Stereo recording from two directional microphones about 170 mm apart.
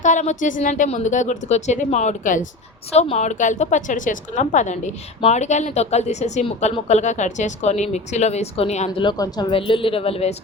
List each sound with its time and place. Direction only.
0.0 s a woman's voice: 45° left (ahead or behind)
9.0 s speech: 20° left (ahead or behind)